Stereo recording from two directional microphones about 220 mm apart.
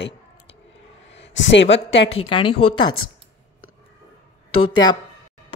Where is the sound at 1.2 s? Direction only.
55° left (ahead or behind).